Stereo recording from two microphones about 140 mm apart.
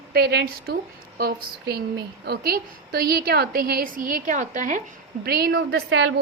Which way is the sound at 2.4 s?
90° right.